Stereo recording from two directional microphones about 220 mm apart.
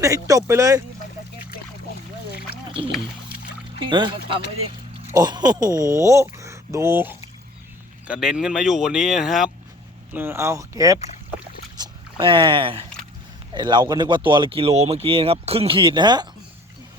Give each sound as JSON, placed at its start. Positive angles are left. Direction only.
{"t": 0.0, "sound": "speech", "side_deg": -15}
{"t": 2.6, "sound": "music", "side_deg": -25}
{"t": 3.8, "sound": "speech", "side_deg": -20}
{"t": 5.1, "sound": "speech", "side_deg": -20}
{"t": 11.0, "sound": "boat", "side_deg": 30}
{"t": 12.2, "sound": "speech", "side_deg": -25}